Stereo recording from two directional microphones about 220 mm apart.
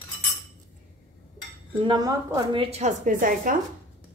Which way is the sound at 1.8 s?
20° right (ahead or behind).